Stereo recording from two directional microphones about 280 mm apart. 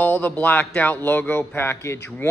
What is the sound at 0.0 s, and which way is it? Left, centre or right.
A man's voice, centre.